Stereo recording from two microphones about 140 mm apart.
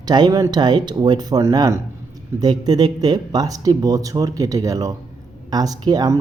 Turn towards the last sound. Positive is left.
turn(degrees=-30)  # may be behind; listen again after turning